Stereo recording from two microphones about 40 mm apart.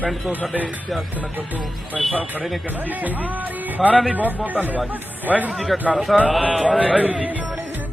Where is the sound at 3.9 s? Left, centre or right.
Right.